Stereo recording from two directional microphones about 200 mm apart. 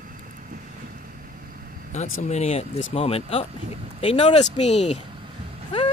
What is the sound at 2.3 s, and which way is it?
Speech, 30° left (ahead or behind).